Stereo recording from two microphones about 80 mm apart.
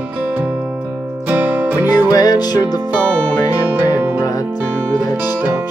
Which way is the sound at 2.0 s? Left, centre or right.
Left.